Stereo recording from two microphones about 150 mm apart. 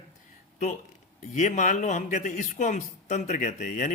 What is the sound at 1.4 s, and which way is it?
Speech, 55° left (ahead or behind).